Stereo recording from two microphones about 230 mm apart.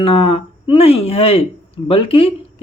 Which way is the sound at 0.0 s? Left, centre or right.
Left.